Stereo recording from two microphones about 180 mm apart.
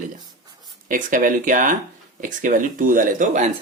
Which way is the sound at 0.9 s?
50° right (ahead or behind).